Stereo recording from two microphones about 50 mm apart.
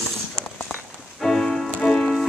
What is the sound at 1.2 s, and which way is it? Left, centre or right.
Music, centre.